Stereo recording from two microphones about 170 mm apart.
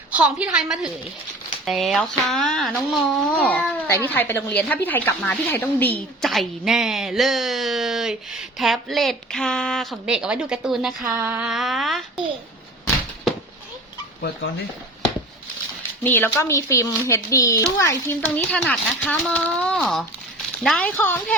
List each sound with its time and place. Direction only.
0.1 s a woman's voice: 5° right (ahead or behind)
11.0 s a sound: 20° right (ahead or behind)
11.3 s speech: centre (ahead or behind)
16.0 s speech: 10° left (ahead or behind)